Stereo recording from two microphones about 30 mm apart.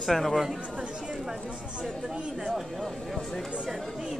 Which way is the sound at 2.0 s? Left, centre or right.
Right.